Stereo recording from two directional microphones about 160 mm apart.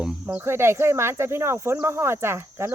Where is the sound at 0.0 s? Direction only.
5° right (ahead or behind).